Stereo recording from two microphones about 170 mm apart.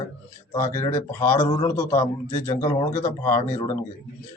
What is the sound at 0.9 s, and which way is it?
A man's voice, 15° left (ahead or behind).